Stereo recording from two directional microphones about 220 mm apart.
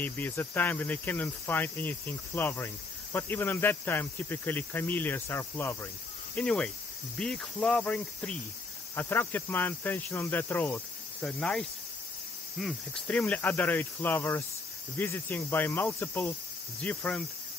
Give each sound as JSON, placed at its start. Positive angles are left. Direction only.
{"t": 0.0, "sound": "cricket", "side_deg": 10}